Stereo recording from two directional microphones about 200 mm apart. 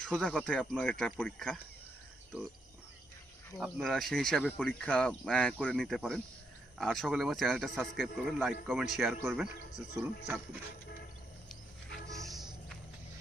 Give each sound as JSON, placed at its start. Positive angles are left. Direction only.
{"t": 0.0, "sound": "speech", "side_deg": 5}
{"t": 3.6, "sound": "speech", "side_deg": 0}
{"t": 12.0, "sound": "music", "side_deg": -15}
{"t": 12.3, "sound": "music", "side_deg": 0}